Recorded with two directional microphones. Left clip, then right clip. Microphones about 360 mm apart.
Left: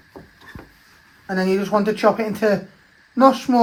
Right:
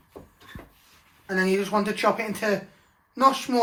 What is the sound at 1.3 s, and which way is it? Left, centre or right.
Speech, left.